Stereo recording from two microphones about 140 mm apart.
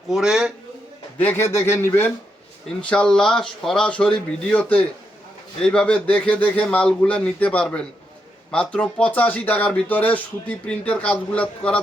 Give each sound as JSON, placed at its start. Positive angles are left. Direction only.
{"t": 0.1, "sound": "speech", "side_deg": -5}
{"t": 1.2, "sound": "speech", "side_deg": 15}
{"t": 2.9, "sound": "speech", "side_deg": 5}